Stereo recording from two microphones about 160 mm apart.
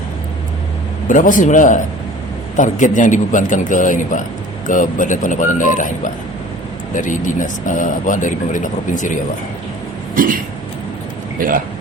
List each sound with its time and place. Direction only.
1.0 s speech: 55° left (ahead or behind)
10.2 s a sound: 60° right (ahead or behind)
11.3 s speech: 60° right (ahead or behind)